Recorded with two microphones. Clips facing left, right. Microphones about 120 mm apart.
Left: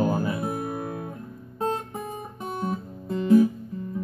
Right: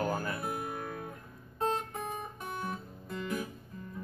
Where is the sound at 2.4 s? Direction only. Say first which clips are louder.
Left 12 dB; 30° left (ahead or behind).